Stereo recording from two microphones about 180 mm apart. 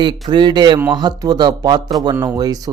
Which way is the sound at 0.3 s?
25° right (ahead or behind).